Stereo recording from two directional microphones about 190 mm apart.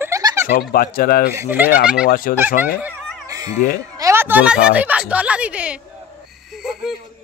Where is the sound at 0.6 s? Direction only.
50° left (ahead or behind).